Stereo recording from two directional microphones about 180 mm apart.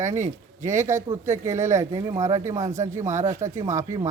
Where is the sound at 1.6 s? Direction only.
15° right (ahead or behind).